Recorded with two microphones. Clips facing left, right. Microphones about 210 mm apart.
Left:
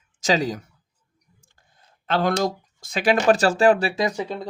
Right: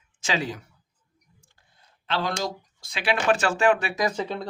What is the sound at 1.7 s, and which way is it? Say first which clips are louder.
Speech: left 5 dB; 50° left (ahead or behind).